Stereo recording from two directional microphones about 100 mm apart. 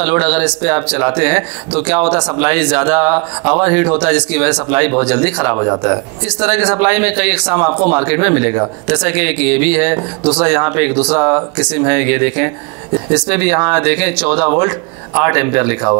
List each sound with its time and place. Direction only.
0.0 s speech: 15° right (ahead or behind)